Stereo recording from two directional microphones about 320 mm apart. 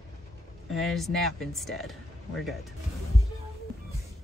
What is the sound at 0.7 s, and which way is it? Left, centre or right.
Speech, centre.